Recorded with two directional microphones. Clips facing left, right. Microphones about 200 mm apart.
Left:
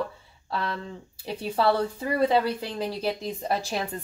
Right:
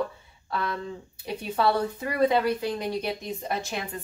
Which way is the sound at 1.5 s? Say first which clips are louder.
Left 1 dB; 30° left (ahead or behind).